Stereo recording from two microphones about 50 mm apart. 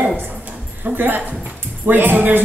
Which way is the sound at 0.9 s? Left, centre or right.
Right.